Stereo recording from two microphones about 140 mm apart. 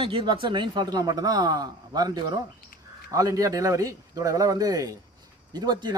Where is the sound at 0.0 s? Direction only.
40° right (ahead or behind).